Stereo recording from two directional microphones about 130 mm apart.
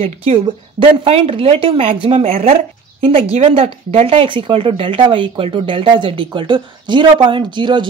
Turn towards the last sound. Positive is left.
turn(degrees=-35)  # may be behind; listen again after turning